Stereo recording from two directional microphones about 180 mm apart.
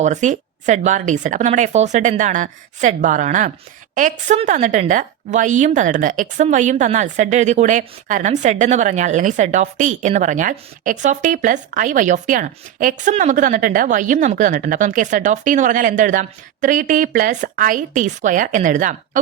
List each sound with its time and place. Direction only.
0.0 s a woman's voice: 40° right (ahead or behind)